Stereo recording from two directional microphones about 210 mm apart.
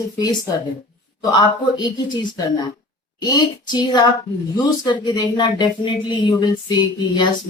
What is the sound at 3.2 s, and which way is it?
Speech, 20° left (ahead or behind).